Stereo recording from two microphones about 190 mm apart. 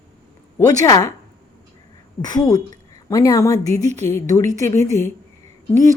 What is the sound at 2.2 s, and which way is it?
A woman's voice, 20° left (ahead or behind).